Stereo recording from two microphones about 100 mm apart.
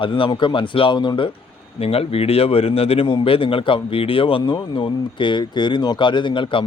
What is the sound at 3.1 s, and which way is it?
Speech, 60° left (ahead or behind).